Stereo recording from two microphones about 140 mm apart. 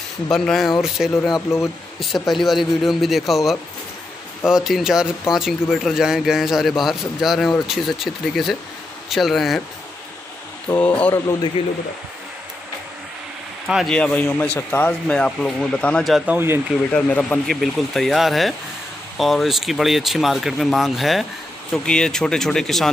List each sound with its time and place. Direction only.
0.3 s speech: centre (ahead or behind)
10.8 s speech: 10° left (ahead or behind)
13.7 s speech: centre (ahead or behind); by 15.0 s 15° left (ahead or behind)
15.0 s speech: 5° left (ahead or behind)
16.3 s speech: 15° right (ahead or behind)
16.9 s speech: 10° left (ahead or behind)